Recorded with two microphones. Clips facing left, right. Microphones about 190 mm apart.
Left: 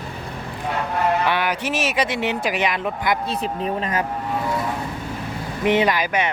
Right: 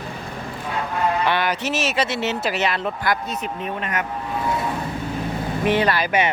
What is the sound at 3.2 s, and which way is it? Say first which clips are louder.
Speech: left 3 dB; 30° left (ahead or behind).